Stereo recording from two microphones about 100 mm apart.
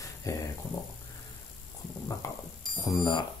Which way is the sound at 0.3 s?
35° left (ahead or behind).